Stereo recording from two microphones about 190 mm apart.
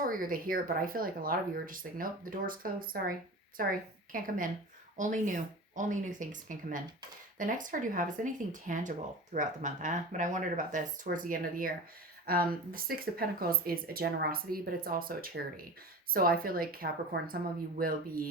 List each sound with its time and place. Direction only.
0.0 s speech: 50° right (ahead or behind)